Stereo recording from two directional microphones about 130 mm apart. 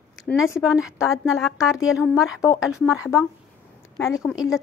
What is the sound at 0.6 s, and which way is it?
A woman's voice, 5° right (ahead or behind).